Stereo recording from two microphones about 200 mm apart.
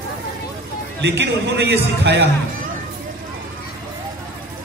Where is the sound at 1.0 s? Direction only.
60° right (ahead or behind).